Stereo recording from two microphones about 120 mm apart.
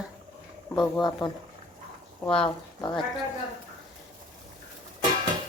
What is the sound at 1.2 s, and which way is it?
Speech, 40° left (ahead or behind).